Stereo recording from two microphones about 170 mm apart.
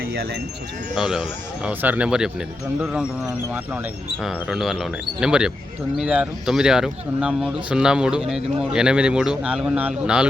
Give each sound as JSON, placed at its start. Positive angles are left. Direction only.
{"t": 0.0, "sound": "sheep", "side_deg": -65}
{"t": 0.9, "sound": "speech", "side_deg": -5}
{"t": 4.2, "sound": "speech", "side_deg": 0}